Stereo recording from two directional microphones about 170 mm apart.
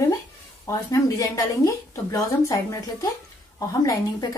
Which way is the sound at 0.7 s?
20° left (ahead or behind).